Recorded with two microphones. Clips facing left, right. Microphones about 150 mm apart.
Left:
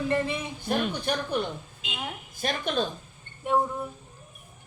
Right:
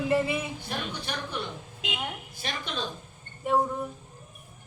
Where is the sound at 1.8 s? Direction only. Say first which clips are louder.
Right 5 dB; 90° right.